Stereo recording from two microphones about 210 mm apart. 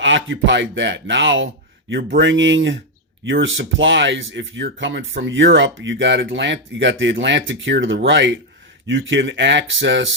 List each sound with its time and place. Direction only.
0.0 s speech: 60° right (ahead or behind)